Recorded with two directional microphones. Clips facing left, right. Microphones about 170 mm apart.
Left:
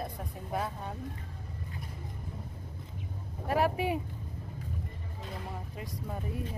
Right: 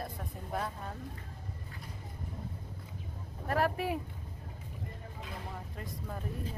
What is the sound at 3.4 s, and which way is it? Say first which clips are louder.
Speech: left 2 dB; 5° left (ahead or behind).